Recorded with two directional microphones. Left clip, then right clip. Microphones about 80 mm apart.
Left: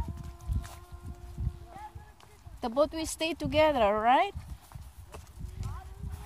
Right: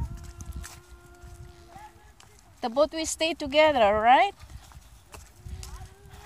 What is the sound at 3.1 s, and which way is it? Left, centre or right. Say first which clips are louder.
Speech: right 4 dB; centre.